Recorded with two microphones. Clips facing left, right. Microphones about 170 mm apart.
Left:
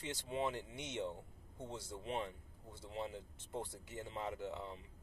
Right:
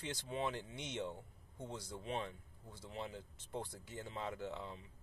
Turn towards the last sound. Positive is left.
turn(degrees=20)  # may be behind; listen again after turning